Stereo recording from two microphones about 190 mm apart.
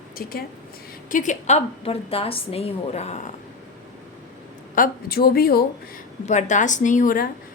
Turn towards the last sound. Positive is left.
turn(degrees=45)  # may be behind; listen again after turning